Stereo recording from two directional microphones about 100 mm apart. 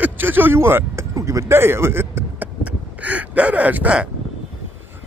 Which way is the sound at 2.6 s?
15° right (ahead or behind).